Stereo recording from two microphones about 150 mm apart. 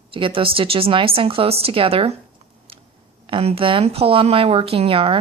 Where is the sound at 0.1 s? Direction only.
35° right (ahead or behind).